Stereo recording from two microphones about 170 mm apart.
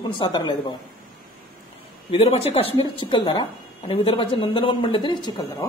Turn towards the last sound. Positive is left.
turn(degrees=20)  # may be behind; listen again after turning